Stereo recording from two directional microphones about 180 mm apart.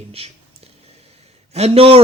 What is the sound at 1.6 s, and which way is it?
Speech, 35° right (ahead or behind).